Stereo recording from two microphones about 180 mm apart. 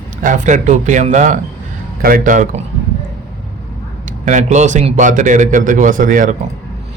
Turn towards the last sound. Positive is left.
turn(degrees=-45)  # may be behind; listen again after turning